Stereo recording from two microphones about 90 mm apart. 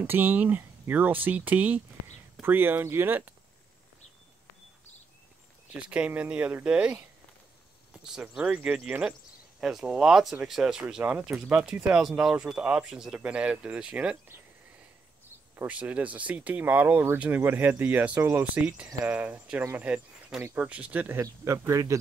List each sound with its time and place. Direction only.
0.0 s speech: 25° right (ahead or behind)
5.9 s speech: 15° right (ahead or behind)
7.9 s a sound: 5° right (ahead or behind)
8.3 s speech: 5° right (ahead or behind)
15.5 s speech: 15° right (ahead or behind)
21.2 s speech: 35° right (ahead or behind)